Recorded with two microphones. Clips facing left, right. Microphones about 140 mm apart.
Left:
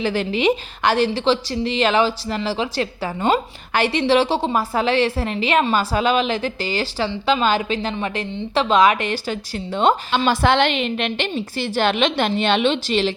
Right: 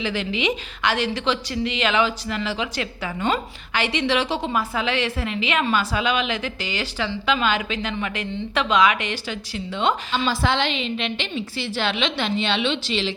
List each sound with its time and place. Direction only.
0.0 s a woman's voice: 40° left (ahead or behind)
10.2 s a woman's voice: 60° left (ahead or behind)
11.3 s a woman's voice: 45° left (ahead or behind)